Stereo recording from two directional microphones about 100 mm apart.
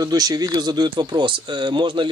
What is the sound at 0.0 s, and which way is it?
Speech, 40° right (ahead or behind).